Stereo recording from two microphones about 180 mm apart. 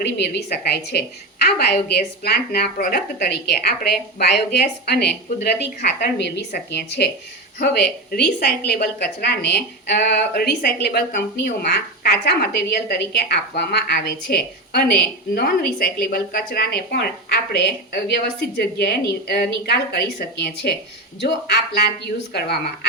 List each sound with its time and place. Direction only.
0.0 s a woman's voice: 65° left (ahead or behind)